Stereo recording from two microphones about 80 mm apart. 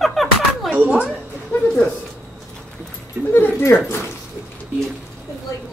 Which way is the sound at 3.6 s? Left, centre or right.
Left.